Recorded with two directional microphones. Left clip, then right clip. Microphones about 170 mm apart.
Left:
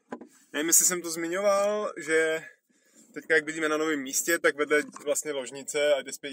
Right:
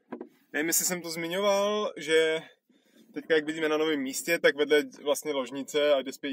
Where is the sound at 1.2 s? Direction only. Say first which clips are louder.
Left 1 dB; 30° right (ahead or behind).